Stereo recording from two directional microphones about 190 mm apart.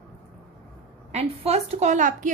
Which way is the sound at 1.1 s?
35° right (ahead or behind).